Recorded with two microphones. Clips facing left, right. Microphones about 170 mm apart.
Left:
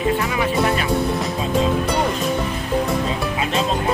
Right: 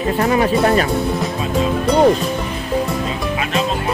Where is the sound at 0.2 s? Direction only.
45° right (ahead or behind).